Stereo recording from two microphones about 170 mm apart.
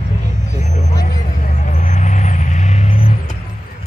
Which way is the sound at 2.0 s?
45° left (ahead or behind).